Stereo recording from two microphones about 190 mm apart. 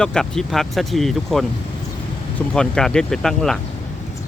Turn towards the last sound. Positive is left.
turn(degrees=0)  # may be behind; listen again after turning